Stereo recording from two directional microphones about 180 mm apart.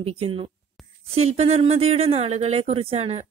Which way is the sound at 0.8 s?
Centre (ahead or behind).